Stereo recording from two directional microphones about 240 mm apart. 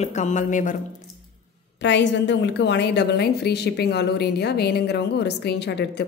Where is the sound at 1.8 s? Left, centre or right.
Left.